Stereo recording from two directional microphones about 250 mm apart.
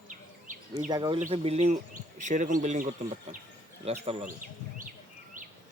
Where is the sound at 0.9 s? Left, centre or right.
Centre.